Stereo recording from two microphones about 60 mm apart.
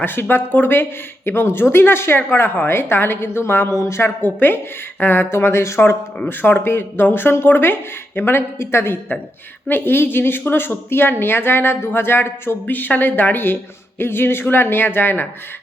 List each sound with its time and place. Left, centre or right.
0.0 s speech: left
4.2 s speech: left
6.2 s speech: left